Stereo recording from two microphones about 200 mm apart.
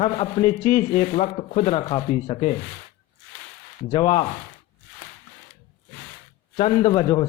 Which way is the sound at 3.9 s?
30° left (ahead or behind).